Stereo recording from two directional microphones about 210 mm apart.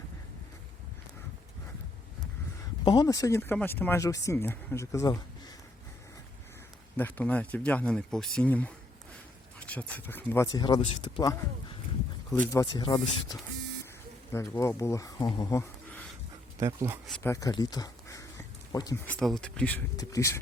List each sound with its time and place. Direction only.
2.8 s speech: 20° left (ahead or behind)
6.9 s speech: 10° left (ahead or behind)
12.5 s speech: 15° left (ahead or behind)
14.3 s speech: 10° left (ahead or behind)
16.6 s speech: 15° right (ahead or behind)
17.1 s speech: 15° left (ahead or behind)
19.0 s speech: 5° left (ahead or behind)